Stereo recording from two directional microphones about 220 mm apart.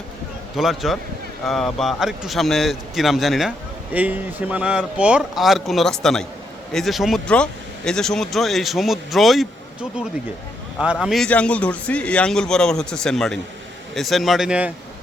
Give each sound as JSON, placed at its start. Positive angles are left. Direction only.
{"t": 0.5, "sound": "speech", "side_deg": 0}
{"t": 10.8, "sound": "speech", "side_deg": -5}